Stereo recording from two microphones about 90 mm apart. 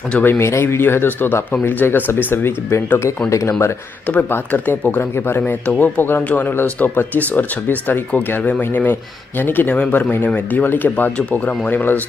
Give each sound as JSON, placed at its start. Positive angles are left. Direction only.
{"t": 0.1, "sound": "speech", "side_deg": 20}
{"t": 4.1, "sound": "speech", "side_deg": 20}